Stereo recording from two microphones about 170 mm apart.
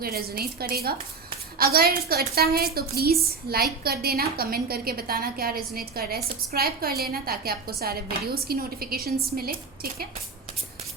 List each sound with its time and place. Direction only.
0.0 s a woman's voice: 65° right (ahead or behind)